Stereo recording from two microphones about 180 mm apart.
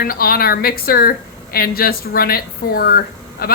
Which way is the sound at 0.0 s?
55° left (ahead or behind).